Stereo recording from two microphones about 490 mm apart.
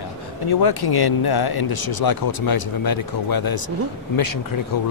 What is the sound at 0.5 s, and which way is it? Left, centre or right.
Speech, left.